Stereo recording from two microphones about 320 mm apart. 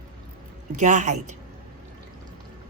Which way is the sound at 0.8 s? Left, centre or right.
Right.